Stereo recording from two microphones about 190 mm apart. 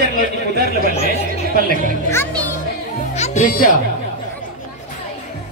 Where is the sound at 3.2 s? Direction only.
45° left (ahead or behind).